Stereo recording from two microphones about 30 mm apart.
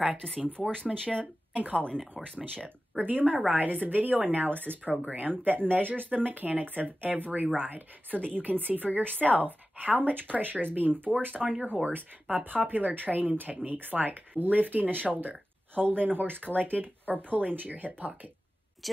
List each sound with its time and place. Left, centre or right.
0.9 s speech: centre
1.5 s speech: right
3.0 s speech: right
3.5 s speech: right
4.4 s speech: right
5.0 s speech: right
5.4 s a woman's voice: right
7.5 s a woman's voice: right
13.7 s speech: right